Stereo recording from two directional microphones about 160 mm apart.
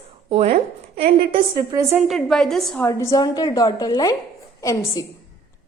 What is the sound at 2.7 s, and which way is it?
A woman's voice, 15° left (ahead or behind).